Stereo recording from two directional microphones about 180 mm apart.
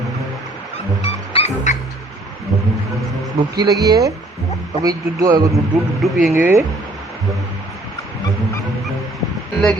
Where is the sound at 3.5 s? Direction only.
20° right (ahead or behind).